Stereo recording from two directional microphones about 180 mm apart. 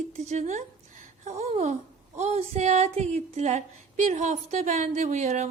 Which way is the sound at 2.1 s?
35° right (ahead or behind).